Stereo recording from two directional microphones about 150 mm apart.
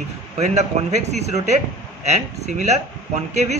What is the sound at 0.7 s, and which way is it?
Speech, 45° right (ahead or behind).